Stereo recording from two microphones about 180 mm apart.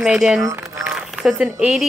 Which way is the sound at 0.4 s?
15° right (ahead or behind).